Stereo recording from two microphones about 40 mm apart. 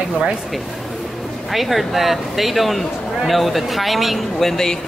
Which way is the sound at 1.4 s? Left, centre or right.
Centre.